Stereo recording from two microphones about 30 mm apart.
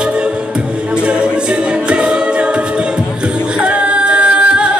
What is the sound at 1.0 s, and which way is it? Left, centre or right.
A capella, right.